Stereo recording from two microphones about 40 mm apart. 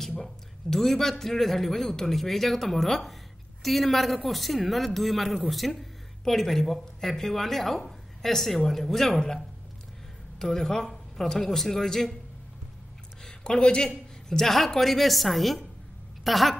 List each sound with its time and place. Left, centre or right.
0.2 s a man's voice: centre
9.1 s speech: centre
10.4 s a man's voice: centre
13.2 s speech: centre
13.8 s a man's voice: centre